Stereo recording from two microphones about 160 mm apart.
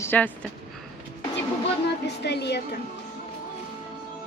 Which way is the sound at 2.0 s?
90° left.